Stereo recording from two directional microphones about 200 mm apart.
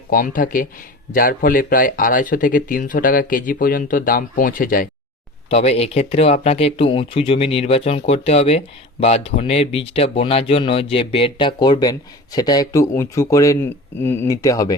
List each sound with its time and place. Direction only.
0.1 s speech: 45° left (ahead or behind)
5.5 s speech: 30° left (ahead or behind)